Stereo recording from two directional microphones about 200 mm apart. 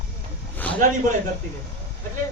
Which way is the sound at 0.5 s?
10° left (ahead or behind).